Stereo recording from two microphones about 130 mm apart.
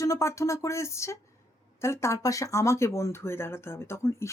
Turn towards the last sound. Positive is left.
turn(degrees=20)  # may be behind; listen again after turning